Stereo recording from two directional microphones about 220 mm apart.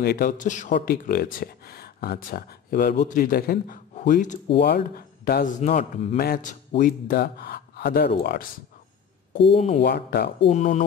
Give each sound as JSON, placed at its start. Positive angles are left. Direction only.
{"t": 0.0, "sound": "speech", "side_deg": 45}
{"t": 4.6, "sound": "speech", "side_deg": 45}
{"t": 9.5, "sound": "speech", "side_deg": 25}
{"t": 9.8, "sound": "speech", "side_deg": 45}
{"t": 10.4, "sound": "speech", "side_deg": 35}